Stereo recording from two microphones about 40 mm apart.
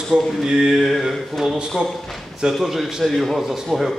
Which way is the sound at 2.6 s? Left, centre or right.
Centre.